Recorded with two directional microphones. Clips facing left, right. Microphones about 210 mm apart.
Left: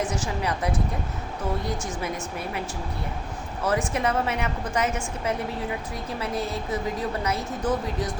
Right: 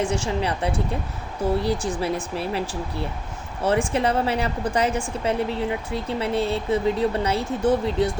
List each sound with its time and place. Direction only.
0.0 s a woman's voice: 30° right (ahead or behind)